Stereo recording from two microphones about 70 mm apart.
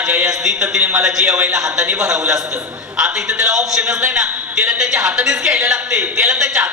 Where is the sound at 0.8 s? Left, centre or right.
Right.